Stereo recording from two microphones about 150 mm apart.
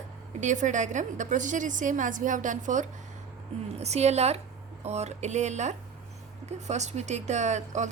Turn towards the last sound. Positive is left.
turn(degrees=-50)  # may be behind; listen again after turning